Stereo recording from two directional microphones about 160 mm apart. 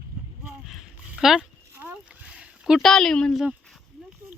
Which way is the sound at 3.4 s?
5° right (ahead or behind).